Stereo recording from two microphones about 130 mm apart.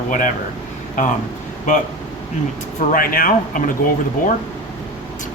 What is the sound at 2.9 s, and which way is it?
Speech, 90° left.